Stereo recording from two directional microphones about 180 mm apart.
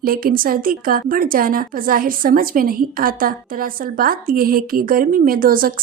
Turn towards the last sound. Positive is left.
turn(degrees=-50)  # may be behind; listen again after turning